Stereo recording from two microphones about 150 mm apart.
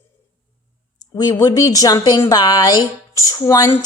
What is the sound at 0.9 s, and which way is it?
A woman's voice, 25° left (ahead or behind).